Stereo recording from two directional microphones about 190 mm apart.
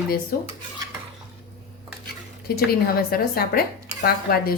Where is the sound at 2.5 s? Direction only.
50° left (ahead or behind).